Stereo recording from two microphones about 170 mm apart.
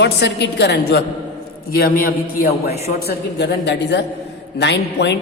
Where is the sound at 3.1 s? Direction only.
90° left.